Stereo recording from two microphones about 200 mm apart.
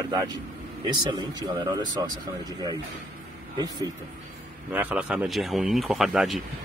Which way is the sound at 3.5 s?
20° right (ahead or behind).